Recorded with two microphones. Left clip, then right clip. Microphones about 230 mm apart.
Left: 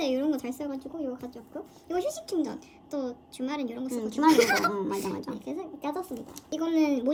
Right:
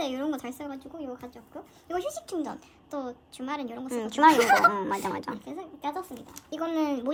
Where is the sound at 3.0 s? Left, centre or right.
Centre.